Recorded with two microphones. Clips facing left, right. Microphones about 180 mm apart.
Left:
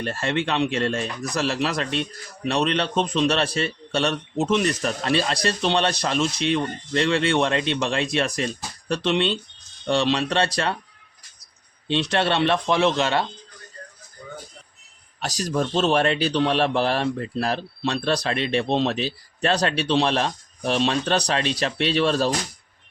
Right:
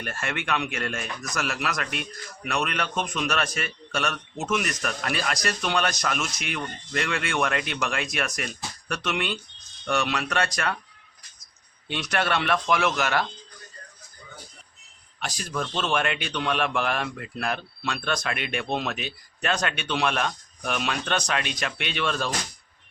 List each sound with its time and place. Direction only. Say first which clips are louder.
0.0 s speech: left 7 dB; 30° left (ahead or behind)
11.9 s speech: left 5 dB; 30° left (ahead or behind)
14.2 s music: left 9 dB; 50° left (ahead or behind)
15.2 s a man's voice: left 6 dB; 40° left (ahead or behind)